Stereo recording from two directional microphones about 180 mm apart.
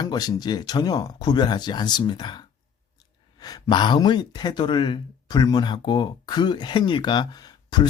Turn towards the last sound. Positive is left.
turn(degrees=25)  # may be behind; listen again after turning